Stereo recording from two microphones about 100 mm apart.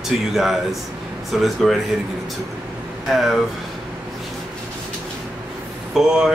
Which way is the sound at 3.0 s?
Centre (ahead or behind).